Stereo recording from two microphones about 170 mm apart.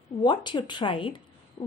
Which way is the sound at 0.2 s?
25° left (ahead or behind).